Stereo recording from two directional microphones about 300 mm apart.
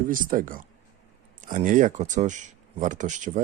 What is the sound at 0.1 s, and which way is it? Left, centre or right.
Speech, right.